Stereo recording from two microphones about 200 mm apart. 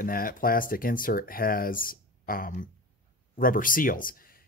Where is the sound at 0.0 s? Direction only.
45° left (ahead or behind).